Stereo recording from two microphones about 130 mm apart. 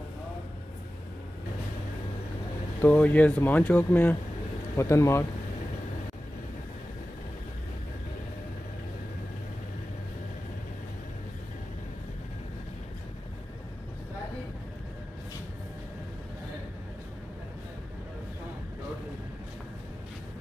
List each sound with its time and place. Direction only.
2.8 s speech: 10° left (ahead or behind)